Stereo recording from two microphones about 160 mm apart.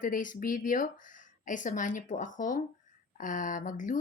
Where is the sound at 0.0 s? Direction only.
55° left (ahead or behind).